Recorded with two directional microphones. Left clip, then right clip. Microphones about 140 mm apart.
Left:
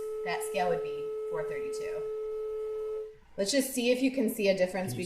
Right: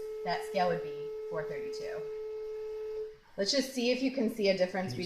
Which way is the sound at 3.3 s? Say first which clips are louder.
Left 2 dB; 25° right (ahead or behind).